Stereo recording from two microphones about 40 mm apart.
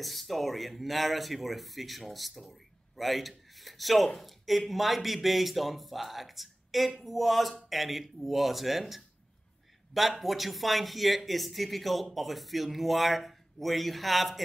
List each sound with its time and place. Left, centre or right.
0.0 s speech: centre